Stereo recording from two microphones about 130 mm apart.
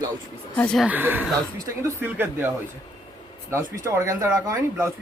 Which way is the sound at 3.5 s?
20° right (ahead or behind).